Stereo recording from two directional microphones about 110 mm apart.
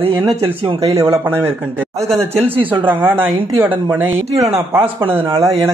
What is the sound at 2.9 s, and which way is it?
Speech, 20° right (ahead or behind).